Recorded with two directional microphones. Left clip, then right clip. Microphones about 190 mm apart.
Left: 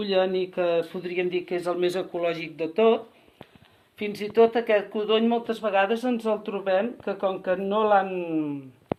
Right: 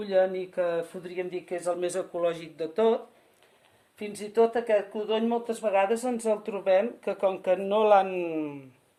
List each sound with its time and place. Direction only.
0.0 s speech: 15° right (ahead or behind)
4.2 s speech: 20° right (ahead or behind); by 8.5 s 40° right (ahead or behind)